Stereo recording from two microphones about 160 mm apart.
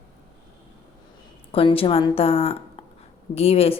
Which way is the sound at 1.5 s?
35° left (ahead or behind).